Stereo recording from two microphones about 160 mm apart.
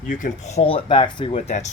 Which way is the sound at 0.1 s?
50° left (ahead or behind).